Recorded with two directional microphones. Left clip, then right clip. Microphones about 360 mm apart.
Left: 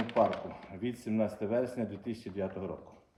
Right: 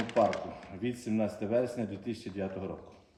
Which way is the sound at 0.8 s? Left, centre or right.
Centre.